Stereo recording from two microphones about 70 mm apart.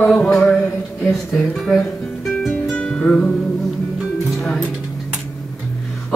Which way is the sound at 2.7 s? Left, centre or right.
Centre.